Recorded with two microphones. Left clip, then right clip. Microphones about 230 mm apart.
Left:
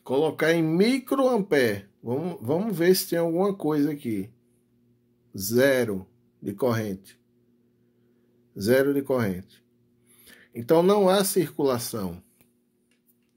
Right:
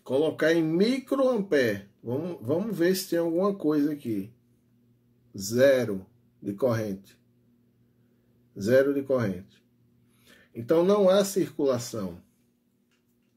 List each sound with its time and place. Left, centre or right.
0.0 s speech: left
5.3 s speech: left
8.5 s speech: left